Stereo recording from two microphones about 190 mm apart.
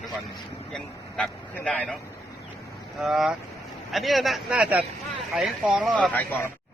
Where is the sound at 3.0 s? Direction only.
Centre (ahead or behind).